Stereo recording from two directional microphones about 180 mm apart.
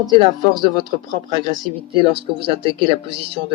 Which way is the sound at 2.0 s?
30° right (ahead or behind).